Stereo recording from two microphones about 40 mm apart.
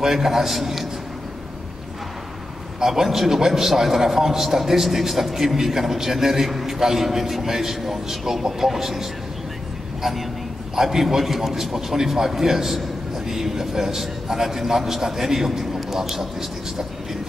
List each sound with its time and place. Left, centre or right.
0.0 s a man's voice: centre
2.8 s a man's voice: centre
10.8 s a man's voice: centre